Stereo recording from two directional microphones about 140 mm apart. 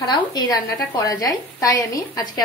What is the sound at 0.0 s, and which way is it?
A woman's voice, 30° left (ahead or behind).